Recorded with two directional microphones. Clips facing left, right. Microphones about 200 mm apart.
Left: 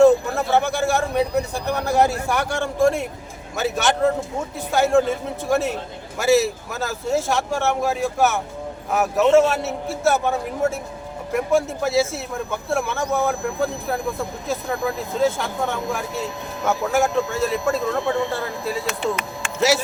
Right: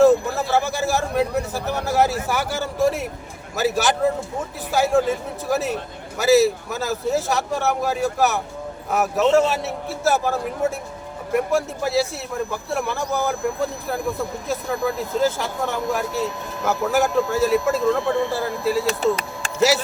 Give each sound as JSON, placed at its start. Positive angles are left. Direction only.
{"t": 0.0, "sound": "a sound", "side_deg": 0}
{"t": 3.5, "sound": "a man's voice", "side_deg": 0}
{"t": 18.9, "sound": "speech", "side_deg": -35}